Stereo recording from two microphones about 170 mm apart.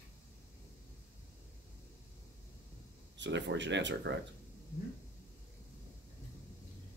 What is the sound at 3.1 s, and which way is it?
Speech, 90° right.